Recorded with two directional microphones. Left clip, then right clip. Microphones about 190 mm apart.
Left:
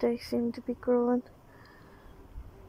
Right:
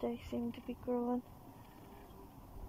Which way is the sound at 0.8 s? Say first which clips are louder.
Left 11 dB; 10° left (ahead or behind).